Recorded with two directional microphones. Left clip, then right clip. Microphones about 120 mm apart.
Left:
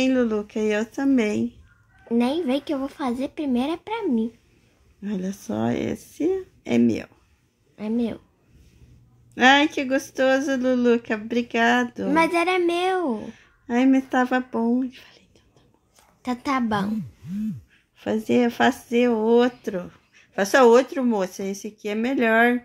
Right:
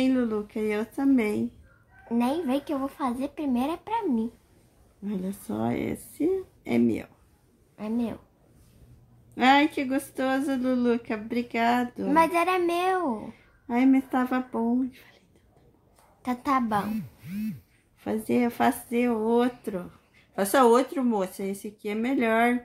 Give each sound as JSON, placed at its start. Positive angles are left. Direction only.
{"t": 0.0, "sound": "a woman's voice", "side_deg": 30}
{"t": 9.3, "sound": "speech", "side_deg": 35}
{"t": 17.9, "sound": "speech", "side_deg": 30}